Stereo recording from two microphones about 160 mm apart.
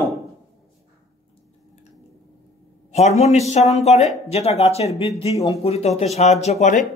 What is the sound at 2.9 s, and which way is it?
Speech, 45° left (ahead or behind).